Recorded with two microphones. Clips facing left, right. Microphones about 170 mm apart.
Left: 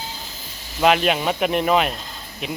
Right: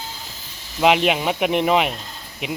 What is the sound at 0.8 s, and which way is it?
Speech, 15° right (ahead or behind).